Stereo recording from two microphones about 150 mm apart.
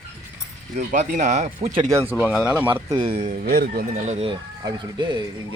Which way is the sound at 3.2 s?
55° right (ahead or behind).